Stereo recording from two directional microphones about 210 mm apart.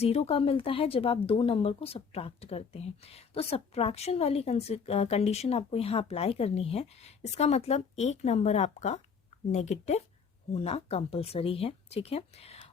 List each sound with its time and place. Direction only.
0.0 s speech: 30° left (ahead or behind)